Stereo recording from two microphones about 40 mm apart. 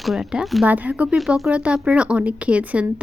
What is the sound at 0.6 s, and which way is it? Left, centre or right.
Speech, right.